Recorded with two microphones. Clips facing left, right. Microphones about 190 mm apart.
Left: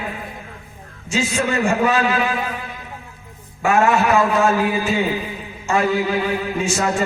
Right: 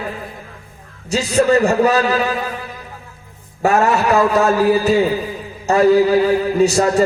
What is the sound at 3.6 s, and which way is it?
A man's voice, 40° right (ahead or behind).